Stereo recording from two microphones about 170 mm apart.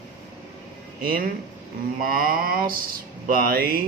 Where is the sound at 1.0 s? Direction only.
60° right (ahead or behind).